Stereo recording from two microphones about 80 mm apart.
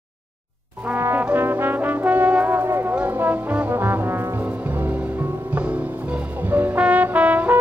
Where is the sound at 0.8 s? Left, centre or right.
Right.